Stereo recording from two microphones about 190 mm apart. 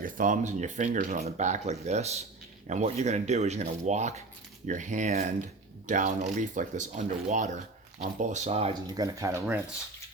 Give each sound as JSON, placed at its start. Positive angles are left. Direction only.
{"t": 0.0, "sound": "speech", "side_deg": -45}
{"t": 9.0, "sound": "speech", "side_deg": -15}